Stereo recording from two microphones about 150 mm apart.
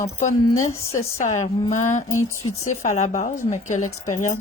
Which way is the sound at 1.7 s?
55° left (ahead or behind).